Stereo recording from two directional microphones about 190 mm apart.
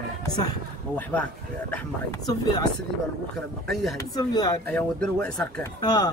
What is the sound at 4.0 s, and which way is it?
Speech, 20° left (ahead or behind).